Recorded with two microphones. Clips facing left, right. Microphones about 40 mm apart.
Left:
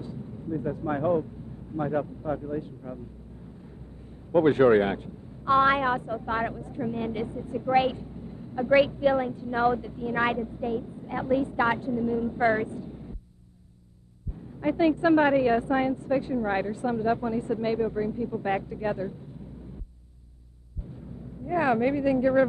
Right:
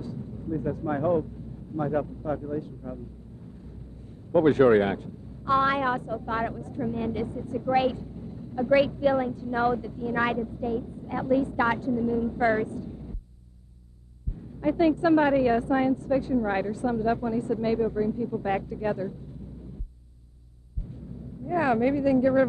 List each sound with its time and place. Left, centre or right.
0.0 s vehicle: centre
0.6 s speech: centre
4.3 s a woman's voice: centre
4.6 s speech: centre
4.9 s a woman's voice: left
9.6 s speech: centre
9.8 s a woman's voice: left
12.6 s a sound: left
14.6 s a woman's voice: centre
21.5 s a woman's voice: centre